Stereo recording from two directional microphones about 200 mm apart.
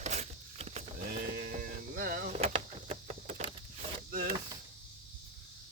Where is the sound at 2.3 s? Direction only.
30° right (ahead or behind).